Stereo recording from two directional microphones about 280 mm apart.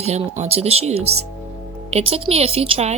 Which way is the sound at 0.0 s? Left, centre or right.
Right.